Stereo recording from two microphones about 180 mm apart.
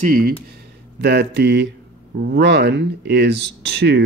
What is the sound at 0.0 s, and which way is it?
Speech, 50° right (ahead or behind).